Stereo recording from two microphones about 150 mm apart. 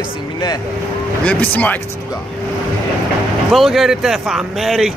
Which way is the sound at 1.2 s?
10° left (ahead or behind).